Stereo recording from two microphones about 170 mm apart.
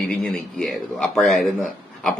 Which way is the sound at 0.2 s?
5° left (ahead or behind).